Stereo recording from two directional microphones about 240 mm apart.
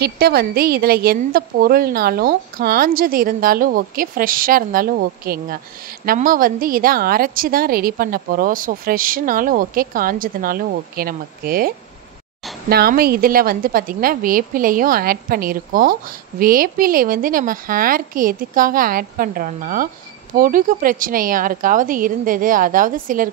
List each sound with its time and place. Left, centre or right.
0.0 s a woman's voice: right